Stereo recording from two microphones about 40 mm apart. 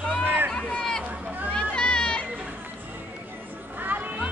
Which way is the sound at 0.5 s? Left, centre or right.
Left.